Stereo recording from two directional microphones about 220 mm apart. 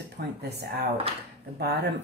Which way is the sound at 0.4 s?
45° right (ahead or behind).